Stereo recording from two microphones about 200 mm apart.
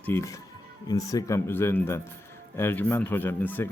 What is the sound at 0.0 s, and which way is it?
Speech, 15° left (ahead or behind).